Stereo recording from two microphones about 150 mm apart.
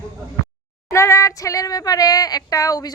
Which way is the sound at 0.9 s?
20° left (ahead or behind).